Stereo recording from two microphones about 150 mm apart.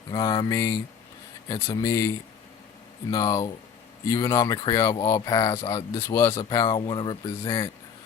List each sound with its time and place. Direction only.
0.1 s speech: 25° left (ahead or behind)